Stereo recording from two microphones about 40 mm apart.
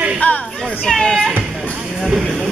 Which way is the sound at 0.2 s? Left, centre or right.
Left.